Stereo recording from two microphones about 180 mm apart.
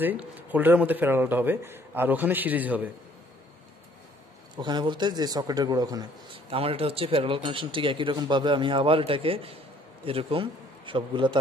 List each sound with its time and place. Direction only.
0.0 s speech: 10° right (ahead or behind)
4.6 s a man's voice: 25° right (ahead or behind)